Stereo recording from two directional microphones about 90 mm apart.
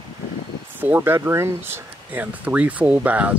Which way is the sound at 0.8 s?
20° right (ahead or behind).